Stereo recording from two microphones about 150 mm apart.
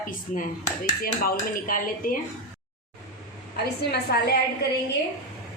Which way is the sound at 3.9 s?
90° left.